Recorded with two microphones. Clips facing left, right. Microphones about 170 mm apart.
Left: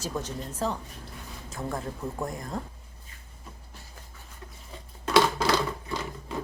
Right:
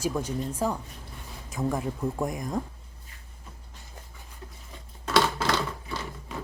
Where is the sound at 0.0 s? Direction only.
10° right (ahead or behind).